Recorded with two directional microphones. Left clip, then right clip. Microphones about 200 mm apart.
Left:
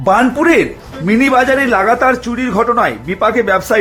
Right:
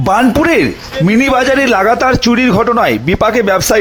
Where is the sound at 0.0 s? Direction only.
50° right (ahead or behind).